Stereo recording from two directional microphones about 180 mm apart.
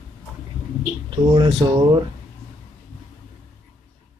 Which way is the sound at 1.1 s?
25° right (ahead or behind).